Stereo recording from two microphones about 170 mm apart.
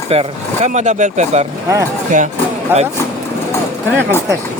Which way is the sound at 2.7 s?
15° right (ahead or behind).